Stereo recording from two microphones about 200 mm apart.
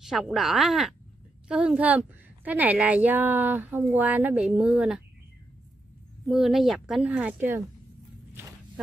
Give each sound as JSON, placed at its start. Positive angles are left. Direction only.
{"t": 0.0, "sound": "a woman's voice", "side_deg": 0}
{"t": 6.2, "sound": "speech", "side_deg": 0}